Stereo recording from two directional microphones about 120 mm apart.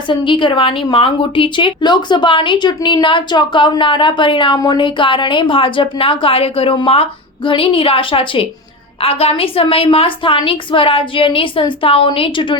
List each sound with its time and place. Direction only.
0.1 s a woman's voice: 45° left (ahead or behind)